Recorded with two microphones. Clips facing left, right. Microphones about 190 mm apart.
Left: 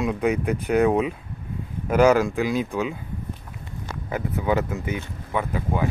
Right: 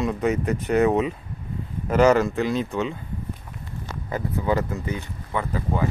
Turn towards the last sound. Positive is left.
turn(degrees=10)  # may be behind; listen again after turning